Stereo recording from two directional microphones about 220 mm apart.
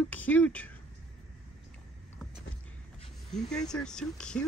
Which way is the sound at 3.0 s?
20° left (ahead or behind).